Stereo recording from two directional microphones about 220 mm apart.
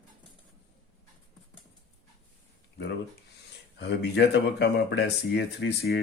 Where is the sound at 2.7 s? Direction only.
50° left (ahead or behind).